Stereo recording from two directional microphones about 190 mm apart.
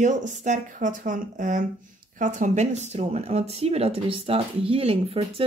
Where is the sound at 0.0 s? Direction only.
40° right (ahead or behind).